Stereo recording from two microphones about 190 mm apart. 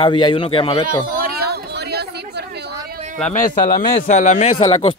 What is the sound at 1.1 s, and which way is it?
Chatter, 50° right (ahead or behind).